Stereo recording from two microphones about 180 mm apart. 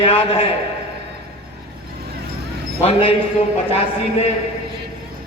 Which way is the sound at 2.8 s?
30° left (ahead or behind).